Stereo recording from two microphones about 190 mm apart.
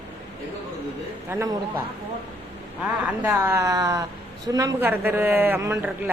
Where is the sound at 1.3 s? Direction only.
15° right (ahead or behind).